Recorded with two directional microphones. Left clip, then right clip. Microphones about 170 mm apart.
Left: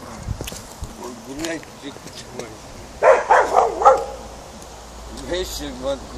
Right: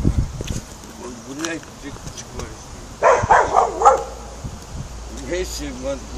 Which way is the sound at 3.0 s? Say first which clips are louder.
Even; 45° right (ahead or behind).